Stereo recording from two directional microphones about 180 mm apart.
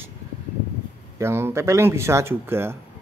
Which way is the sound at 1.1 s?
15° right (ahead or behind).